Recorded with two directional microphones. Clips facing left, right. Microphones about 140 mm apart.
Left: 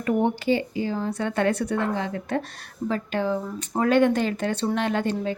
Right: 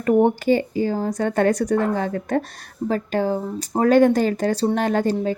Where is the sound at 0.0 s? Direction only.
45° right (ahead or behind).